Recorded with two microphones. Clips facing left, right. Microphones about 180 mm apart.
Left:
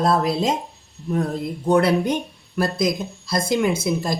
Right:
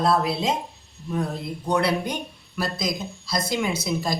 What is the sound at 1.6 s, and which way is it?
Speech, 45° left (ahead or behind).